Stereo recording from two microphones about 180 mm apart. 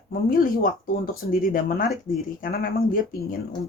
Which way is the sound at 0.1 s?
50° left (ahead or behind).